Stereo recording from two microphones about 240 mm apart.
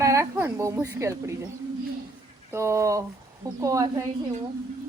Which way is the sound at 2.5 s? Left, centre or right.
Centre.